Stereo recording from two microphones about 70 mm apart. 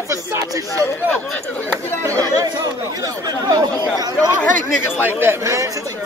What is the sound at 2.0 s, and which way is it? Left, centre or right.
Speech, right.